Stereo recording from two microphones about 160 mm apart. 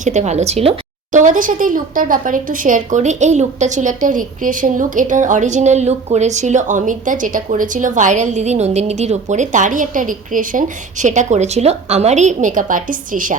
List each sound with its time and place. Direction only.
0.0 s speech: 45° right (ahead or behind)
1.1 s speech: 55° right (ahead or behind)